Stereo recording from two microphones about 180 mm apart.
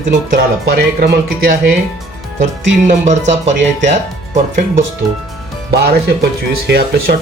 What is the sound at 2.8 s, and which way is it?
Speech, 40° right (ahead or behind).